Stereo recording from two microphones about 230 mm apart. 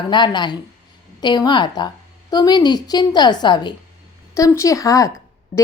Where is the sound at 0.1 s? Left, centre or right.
Centre.